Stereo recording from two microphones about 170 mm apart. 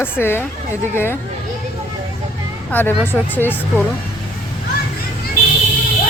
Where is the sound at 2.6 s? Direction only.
10° left (ahead or behind).